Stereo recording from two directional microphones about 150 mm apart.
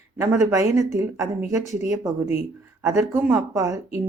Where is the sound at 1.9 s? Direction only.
20° right (ahead or behind).